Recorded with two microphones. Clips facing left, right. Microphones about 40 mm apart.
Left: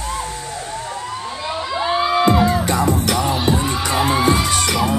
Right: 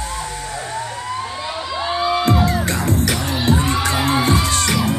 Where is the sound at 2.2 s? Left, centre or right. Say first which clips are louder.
Left 2 dB; centre.